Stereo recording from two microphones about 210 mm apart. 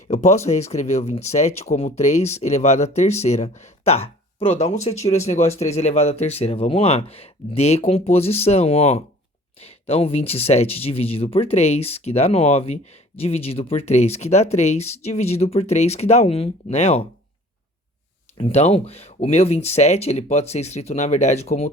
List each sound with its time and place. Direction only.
0.1 s speech: 30° left (ahead or behind)
18.3 s speech: 30° left (ahead or behind)